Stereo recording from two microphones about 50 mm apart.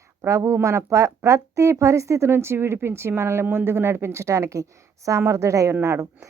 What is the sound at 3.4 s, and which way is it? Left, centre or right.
Speech, right.